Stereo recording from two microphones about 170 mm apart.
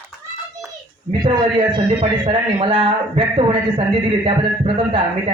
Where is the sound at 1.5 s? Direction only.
30° right (ahead or behind).